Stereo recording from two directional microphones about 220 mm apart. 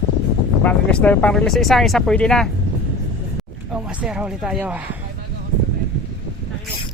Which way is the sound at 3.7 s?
5° right (ahead or behind).